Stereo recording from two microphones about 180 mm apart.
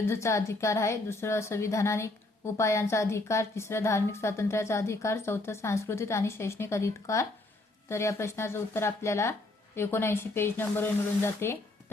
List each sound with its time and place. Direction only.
0.0 s a woman's voice: 15° left (ahead or behind)